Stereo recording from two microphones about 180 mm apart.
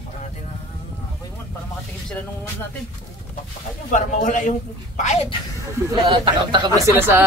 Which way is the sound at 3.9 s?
45° left (ahead or behind).